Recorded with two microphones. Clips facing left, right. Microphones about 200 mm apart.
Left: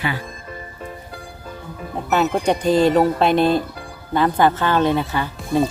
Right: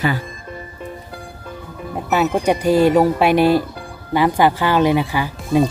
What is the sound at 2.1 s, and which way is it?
Speech, centre (ahead or behind).